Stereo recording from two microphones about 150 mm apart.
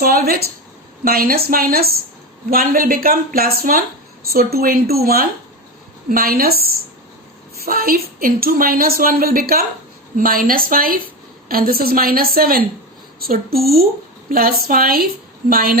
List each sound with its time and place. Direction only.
0.0 s a woman's voice: 85° right
1.0 s a woman's voice: 80° right
4.3 s a woman's voice: 90° right
6.1 s a woman's voice: 75° right (ahead or behind)
7.6 s a woman's voice: 80° right
10.2 s a woman's voice: 75° right (ahead or behind); by 13.8 s 90° right
14.3 s a woman's voice: 70° right (ahead or behind)